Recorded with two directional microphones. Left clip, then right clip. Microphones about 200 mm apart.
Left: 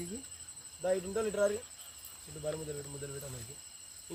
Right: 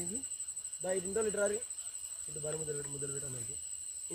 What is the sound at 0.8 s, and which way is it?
Speech, 40° left (ahead or behind).